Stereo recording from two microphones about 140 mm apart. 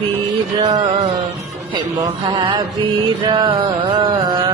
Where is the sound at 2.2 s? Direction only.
35° right (ahead or behind).